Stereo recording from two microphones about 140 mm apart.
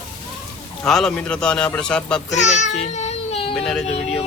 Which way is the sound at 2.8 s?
50° left (ahead or behind).